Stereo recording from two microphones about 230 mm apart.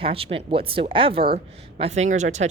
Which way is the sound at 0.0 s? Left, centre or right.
Right.